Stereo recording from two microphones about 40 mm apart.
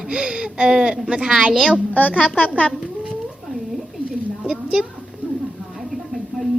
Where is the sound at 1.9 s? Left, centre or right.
Left.